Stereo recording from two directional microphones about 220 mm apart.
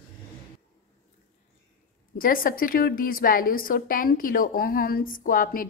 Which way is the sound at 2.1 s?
40° left (ahead or behind).